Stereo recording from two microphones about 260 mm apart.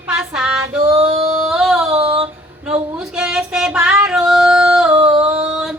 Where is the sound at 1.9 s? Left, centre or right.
Right.